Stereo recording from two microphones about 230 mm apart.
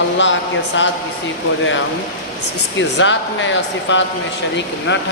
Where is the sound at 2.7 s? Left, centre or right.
Left.